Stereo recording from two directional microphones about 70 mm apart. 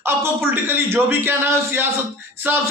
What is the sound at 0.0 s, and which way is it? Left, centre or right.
A man's voice, right.